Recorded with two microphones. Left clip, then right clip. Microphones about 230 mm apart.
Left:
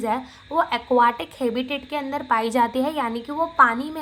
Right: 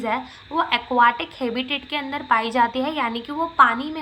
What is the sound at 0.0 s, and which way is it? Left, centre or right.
A woman's voice, left.